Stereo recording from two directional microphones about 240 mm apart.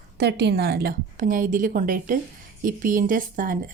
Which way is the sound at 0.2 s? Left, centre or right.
Right.